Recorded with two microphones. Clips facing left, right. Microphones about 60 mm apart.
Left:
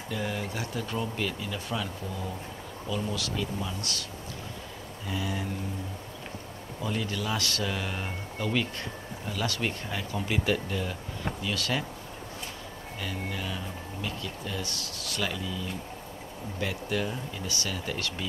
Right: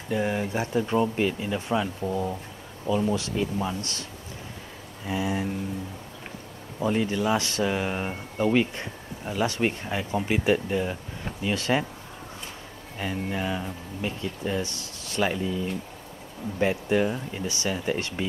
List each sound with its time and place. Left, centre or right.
0.1 s speech: right
5.0 s speech: right
6.8 s speech: right
13.0 s speech: right